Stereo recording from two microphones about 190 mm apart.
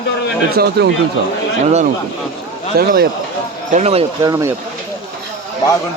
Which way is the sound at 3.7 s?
35° right (ahead or behind).